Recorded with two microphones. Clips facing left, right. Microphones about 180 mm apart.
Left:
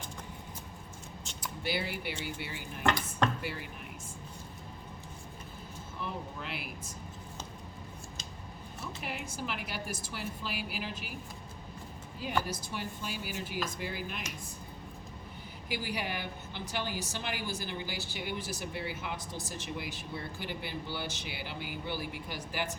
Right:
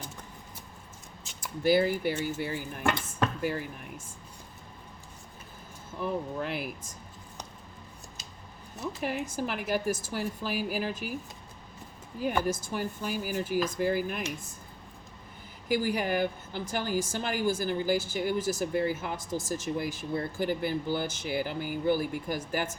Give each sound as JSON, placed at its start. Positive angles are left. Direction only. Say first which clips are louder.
{"t": 1.6, "sound": "a woman's voice", "louder": "right 11 dB", "side_deg": -45}
{"t": 6.4, "sound": "a woman's voice", "louder": "right 8 dB", "side_deg": -45}
{"t": 8.8, "sound": "a woman's voice", "louder": "right 8 dB", "side_deg": -40}
{"t": 12.4, "sound": "a woman's voice", "louder": "right 2 dB", "side_deg": -50}
{"t": 15.7, "sound": "a woman's voice", "louder": "right 9 dB", "side_deg": -45}